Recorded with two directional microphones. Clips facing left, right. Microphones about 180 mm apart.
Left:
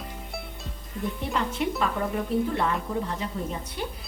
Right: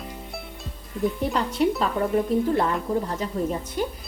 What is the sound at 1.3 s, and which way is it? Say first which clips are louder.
Speech: right 4 dB; 35° right (ahead or behind).